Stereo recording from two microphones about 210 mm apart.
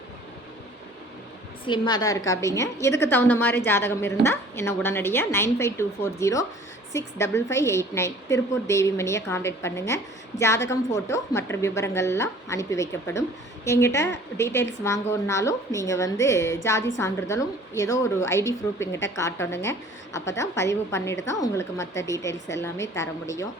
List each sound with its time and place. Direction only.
1.6 s a woman's voice: 20° left (ahead or behind)